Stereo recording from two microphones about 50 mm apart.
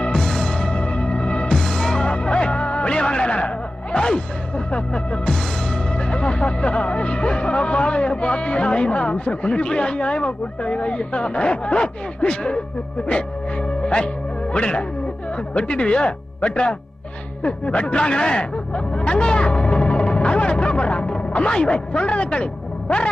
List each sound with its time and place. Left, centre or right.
0.0 s music: centre
1.5 s music: centre
17.4 s speech: left